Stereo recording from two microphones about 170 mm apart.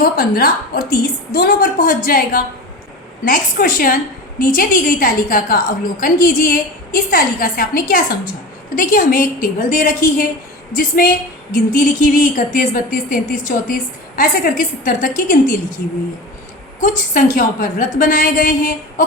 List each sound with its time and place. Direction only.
0.0 s a woman's voice: 60° left (ahead or behind)
16.8 s speech: 50° left (ahead or behind)